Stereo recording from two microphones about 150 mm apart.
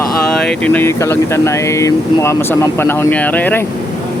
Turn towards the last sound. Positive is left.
turn(degrees=10)  # may be behind; listen again after turning